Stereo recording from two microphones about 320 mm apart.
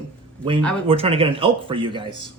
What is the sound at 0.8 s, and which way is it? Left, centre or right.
Speech, centre.